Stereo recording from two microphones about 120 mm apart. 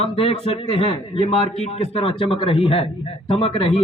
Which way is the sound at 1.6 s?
55° left (ahead or behind).